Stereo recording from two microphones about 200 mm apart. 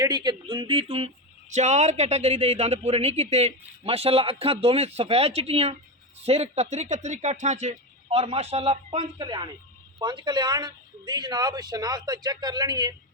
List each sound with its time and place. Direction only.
0.0 s speech: 20° right (ahead or behind)